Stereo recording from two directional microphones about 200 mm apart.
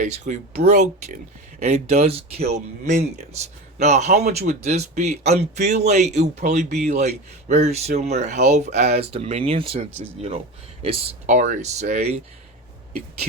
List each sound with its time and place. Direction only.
0.0 s speech: 35° right (ahead or behind)